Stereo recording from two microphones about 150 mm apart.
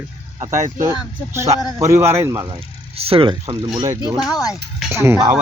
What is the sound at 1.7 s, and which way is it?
Speech, 20° right (ahead or behind).